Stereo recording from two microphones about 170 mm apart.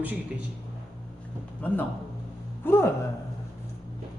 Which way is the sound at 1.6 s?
10° left (ahead or behind).